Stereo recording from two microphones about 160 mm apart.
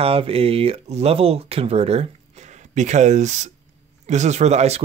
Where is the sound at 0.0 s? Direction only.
35° right (ahead or behind).